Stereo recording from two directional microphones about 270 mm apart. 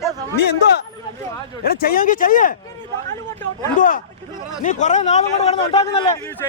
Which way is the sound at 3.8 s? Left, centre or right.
Left.